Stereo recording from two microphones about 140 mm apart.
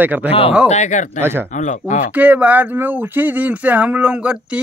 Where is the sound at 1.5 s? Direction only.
60° left (ahead or behind).